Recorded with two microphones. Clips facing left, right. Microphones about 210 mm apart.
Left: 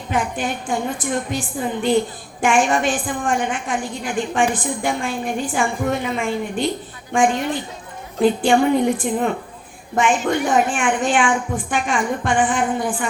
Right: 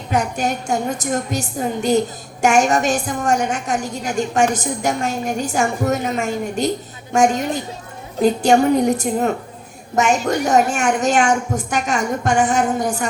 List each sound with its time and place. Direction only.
0.1 s a woman's voice: 40° right (ahead or behind)